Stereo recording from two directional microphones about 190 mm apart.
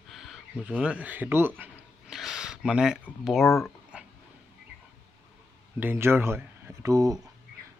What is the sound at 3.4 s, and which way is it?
Speech, 15° left (ahead or behind).